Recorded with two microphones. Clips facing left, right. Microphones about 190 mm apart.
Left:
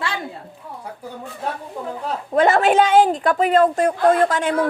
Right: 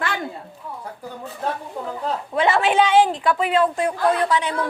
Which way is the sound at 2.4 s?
45° left (ahead or behind).